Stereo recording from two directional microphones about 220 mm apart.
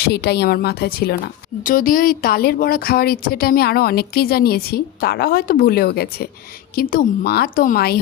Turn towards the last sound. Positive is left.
turn(degrees=45)  # may be behind; listen again after turning